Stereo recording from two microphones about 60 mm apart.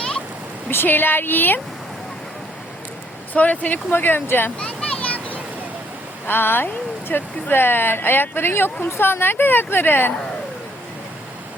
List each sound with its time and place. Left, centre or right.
0.7 s speech: left
3.3 s speech: left
4.6 s a sound: centre
6.2 s speech: left